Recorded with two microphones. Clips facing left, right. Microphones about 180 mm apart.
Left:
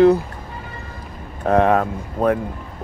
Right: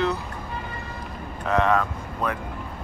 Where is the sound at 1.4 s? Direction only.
50° left (ahead or behind).